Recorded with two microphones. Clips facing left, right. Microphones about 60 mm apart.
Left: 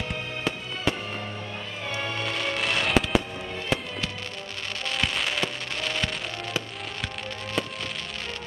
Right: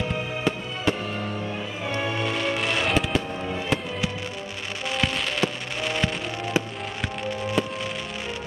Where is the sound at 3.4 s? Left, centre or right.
Centre.